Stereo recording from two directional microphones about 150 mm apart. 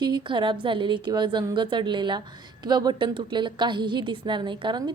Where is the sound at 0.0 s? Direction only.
30° right (ahead or behind).